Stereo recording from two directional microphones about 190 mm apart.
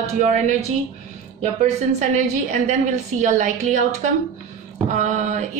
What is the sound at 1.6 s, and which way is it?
A woman's voice, 35° right (ahead or behind).